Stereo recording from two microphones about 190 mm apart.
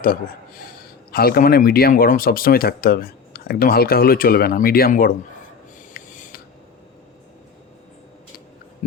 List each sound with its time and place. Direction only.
1.1 s speech: 50° left (ahead or behind)
5.9 s snort: 50° left (ahead or behind)